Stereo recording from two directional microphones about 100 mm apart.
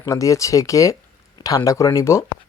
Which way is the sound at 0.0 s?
35° left (ahead or behind).